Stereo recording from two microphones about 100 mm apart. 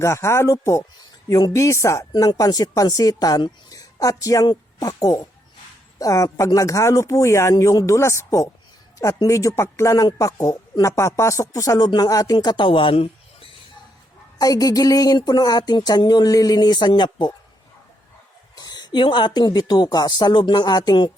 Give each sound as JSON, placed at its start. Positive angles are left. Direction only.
{"t": 0.0, "sound": "speech", "side_deg": 30}
{"t": 14.3, "sound": "speech", "side_deg": 40}
{"t": 18.5, "sound": "a woman's voice", "side_deg": 45}